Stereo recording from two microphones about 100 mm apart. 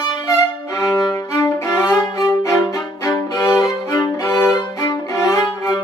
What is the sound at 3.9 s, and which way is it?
Violin, 30° left (ahead or behind).